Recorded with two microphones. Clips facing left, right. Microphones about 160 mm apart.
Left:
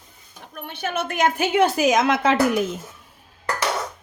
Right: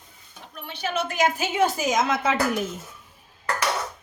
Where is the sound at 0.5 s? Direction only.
55° left (ahead or behind); by 2.4 s 70° left (ahead or behind).